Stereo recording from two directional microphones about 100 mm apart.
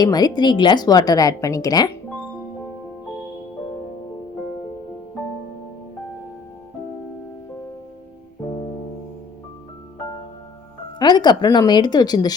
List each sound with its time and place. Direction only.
0.0 s a woman's voice: 40° left (ahead or behind)
11.0 s speech: 45° left (ahead or behind)